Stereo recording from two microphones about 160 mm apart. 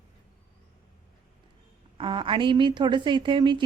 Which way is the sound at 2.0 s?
30° right (ahead or behind).